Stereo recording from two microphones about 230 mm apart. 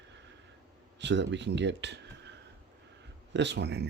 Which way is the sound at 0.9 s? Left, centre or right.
Right.